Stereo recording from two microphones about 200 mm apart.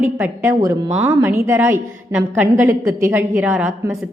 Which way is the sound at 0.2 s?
10° right (ahead or behind).